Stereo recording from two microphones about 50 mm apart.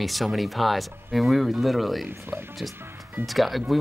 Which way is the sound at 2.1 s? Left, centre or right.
Right.